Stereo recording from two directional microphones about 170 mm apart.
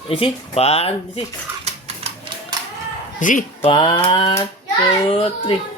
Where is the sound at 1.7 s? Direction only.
35° right (ahead or behind).